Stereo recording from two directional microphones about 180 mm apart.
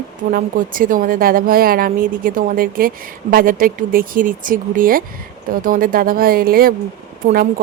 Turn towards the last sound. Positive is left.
turn(degrees=-55)  # may be behind; listen again after turning